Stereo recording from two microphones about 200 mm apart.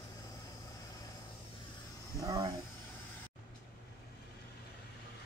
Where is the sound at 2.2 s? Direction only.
20° right (ahead or behind).